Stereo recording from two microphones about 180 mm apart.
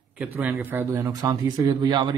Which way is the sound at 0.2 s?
10° right (ahead or behind).